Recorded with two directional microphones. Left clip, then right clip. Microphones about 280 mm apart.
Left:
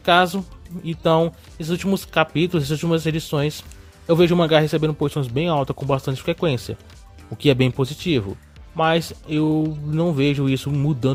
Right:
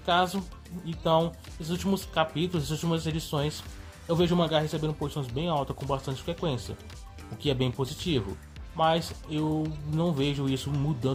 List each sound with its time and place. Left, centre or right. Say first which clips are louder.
0.0 s speech: left 9 dB; left